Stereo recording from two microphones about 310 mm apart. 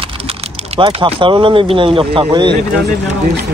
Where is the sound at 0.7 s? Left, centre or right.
Centre.